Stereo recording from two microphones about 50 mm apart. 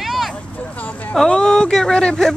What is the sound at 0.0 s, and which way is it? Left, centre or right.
Vehicle, centre.